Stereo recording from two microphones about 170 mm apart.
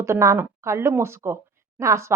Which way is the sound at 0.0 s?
15° right (ahead or behind).